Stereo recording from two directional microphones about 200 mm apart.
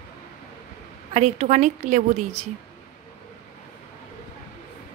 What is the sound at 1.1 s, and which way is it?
A woman's voice, 35° right (ahead or behind).